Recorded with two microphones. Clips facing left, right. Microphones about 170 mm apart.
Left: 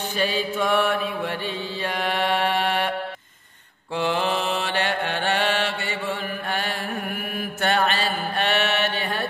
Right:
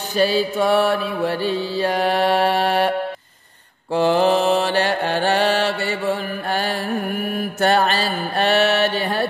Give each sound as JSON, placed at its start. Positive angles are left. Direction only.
{"t": 0.2, "sound": "mantra", "side_deg": -35}
{"t": 3.9, "sound": "mantra", "side_deg": -40}